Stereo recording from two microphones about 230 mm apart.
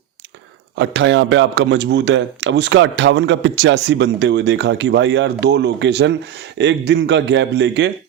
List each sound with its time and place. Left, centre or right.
0.8 s a man's voice: right